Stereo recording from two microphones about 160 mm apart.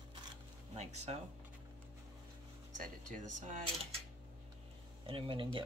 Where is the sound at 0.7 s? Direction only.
45° right (ahead or behind).